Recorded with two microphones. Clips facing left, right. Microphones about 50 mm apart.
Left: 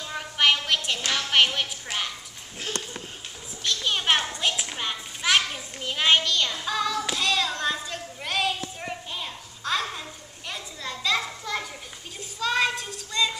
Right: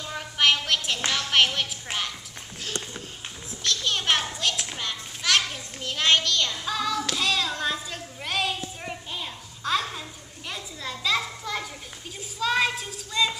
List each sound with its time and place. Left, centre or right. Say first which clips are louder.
0.0 s a sound: even; centre
1.1 s a woman's voice: left 1 dB; centre
3.6 s children playing: left 1 dB; centre
4.4 s a sound: left 1 dB; centre
4.7 s children playing: left 1 dB; centre
10.5 s a child's voice: even; centre